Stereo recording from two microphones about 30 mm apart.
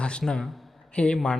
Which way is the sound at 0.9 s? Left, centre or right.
Left.